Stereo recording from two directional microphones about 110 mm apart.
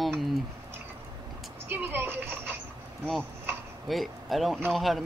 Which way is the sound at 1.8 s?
20° right (ahead or behind).